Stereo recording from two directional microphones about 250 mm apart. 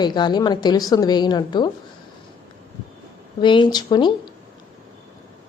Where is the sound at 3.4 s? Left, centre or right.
Centre.